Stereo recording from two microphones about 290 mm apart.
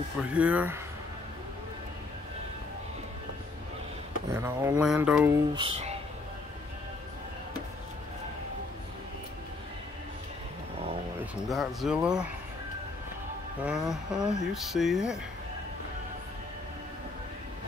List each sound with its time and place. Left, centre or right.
0.3 s speech: centre
4.3 s speech: centre
5.5 s speech: centre
11.4 s speech: centre
13.7 s speech: centre